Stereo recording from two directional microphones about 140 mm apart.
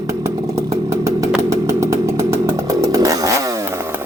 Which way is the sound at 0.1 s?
20° right (ahead or behind).